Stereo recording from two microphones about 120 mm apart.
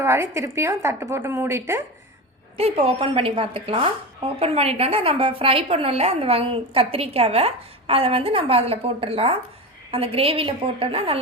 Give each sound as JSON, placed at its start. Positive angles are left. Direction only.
{"t": 0.0, "sound": "a woman's voice", "side_deg": -20}
{"t": 2.6, "sound": "a woman's voice", "side_deg": -55}